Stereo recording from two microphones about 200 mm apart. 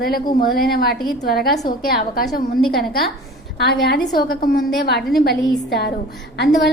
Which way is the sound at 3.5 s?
55° left (ahead or behind).